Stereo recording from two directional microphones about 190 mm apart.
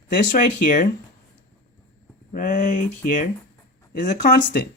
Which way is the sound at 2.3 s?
40° left (ahead or behind).